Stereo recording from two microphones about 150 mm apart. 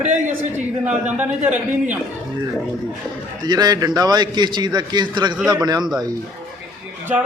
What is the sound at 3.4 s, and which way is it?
A man's voice, 25° right (ahead or behind).